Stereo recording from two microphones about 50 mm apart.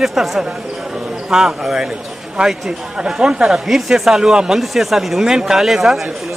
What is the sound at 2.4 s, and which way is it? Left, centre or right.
A man's voice, right.